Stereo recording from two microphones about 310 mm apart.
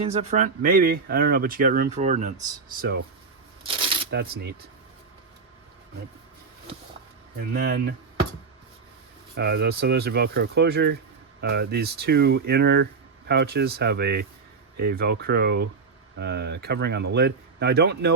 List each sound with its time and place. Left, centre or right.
0.0 s speech: centre
4.1 s speech: right
7.5 s speech: right
9.3 s speech: right